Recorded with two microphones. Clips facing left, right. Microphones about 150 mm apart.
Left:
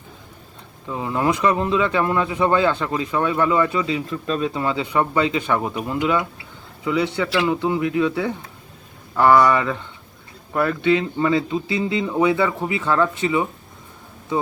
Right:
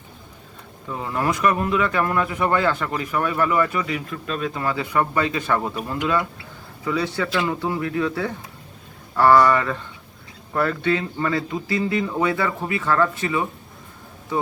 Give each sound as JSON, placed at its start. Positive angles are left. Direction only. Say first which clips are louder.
{"t": 0.9, "sound": "speech", "louder": "left 3 dB", "side_deg": 15}